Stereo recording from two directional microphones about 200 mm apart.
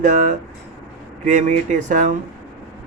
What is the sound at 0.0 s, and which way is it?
Speech, 40° right (ahead or behind).